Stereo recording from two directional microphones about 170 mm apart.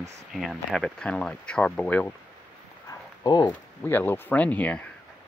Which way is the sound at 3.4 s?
10° left (ahead or behind).